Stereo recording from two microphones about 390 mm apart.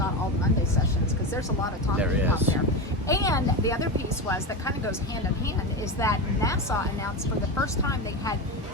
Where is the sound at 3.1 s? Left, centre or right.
Centre.